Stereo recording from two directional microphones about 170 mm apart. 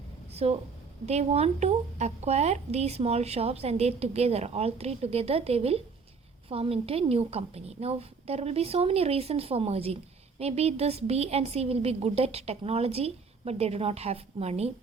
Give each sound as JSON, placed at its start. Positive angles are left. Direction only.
{"t": 0.4, "sound": "a woman's voice", "side_deg": -40}